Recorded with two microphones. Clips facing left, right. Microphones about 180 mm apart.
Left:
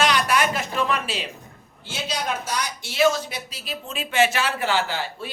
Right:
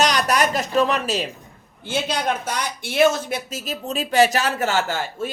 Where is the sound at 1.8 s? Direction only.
55° right (ahead or behind).